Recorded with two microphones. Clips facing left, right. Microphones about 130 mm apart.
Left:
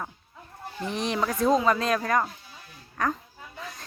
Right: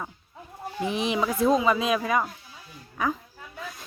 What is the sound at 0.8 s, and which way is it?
Speech, 10° right (ahead or behind).